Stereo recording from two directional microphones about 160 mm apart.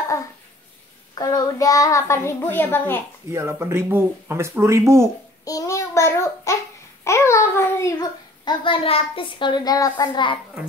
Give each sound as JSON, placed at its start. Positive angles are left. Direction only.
{"t": 1.1, "sound": "a child's voice", "side_deg": 25}
{"t": 3.3, "sound": "speech", "side_deg": -15}
{"t": 5.4, "sound": "child singing", "side_deg": 20}
{"t": 7.1, "sound": "a child's voice", "side_deg": 20}